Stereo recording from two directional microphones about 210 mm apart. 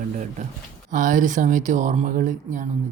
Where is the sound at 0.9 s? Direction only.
40° right (ahead or behind).